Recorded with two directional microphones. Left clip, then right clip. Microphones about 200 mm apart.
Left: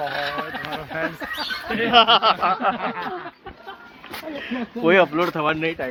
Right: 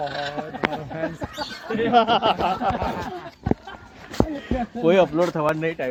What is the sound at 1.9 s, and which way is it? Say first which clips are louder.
Speech: left 4 dB; 20° right (ahead or behind).